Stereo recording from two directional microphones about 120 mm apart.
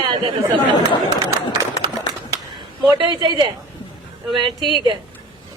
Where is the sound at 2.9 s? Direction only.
40° right (ahead or behind).